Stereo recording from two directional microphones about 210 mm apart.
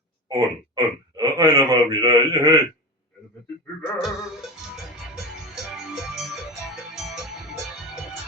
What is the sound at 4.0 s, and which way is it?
Music, centre (ahead or behind).